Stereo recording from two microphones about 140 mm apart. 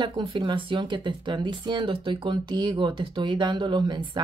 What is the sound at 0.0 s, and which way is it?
Speech, 35° right (ahead or behind).